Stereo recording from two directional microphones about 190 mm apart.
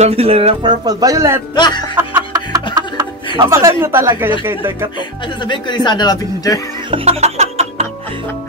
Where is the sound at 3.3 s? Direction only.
15° right (ahead or behind).